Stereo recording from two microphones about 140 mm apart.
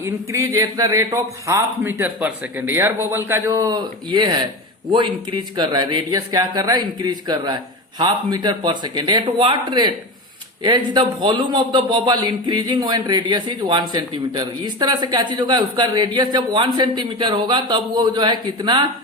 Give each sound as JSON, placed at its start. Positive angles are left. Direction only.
{"t": 0.0, "sound": "a man's voice", "side_deg": -20}